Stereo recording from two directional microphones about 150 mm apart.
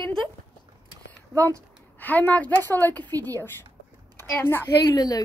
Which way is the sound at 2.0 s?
10° left (ahead or behind).